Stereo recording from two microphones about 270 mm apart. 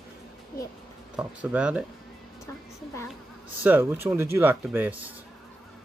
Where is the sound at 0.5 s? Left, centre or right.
Left.